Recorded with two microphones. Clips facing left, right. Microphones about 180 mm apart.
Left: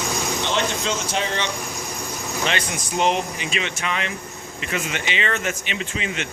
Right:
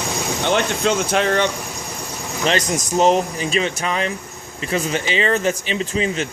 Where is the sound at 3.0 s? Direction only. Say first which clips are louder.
Right 5 dB; 40° right (ahead or behind).